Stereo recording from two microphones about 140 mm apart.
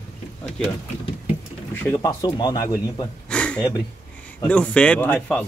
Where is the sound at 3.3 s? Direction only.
5° left (ahead or behind).